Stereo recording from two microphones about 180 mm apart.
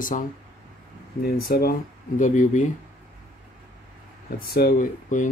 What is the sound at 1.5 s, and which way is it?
Speech, 55° left (ahead or behind).